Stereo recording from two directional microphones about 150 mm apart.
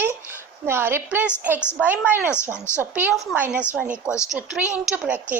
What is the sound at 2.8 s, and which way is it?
A woman's voice, 10° right (ahead or behind).